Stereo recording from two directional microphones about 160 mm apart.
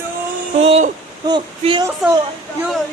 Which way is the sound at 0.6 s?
40° right (ahead or behind).